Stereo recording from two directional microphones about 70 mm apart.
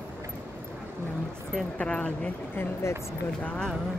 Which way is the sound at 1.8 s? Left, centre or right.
Centre.